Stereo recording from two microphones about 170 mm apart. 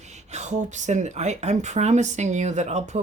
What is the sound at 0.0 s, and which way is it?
Speech, 40° right (ahead or behind).